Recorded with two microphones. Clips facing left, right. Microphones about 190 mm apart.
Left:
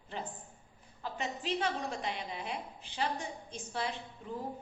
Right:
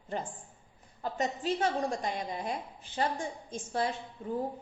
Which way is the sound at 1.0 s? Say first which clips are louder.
Right 6 dB; 45° right (ahead or behind).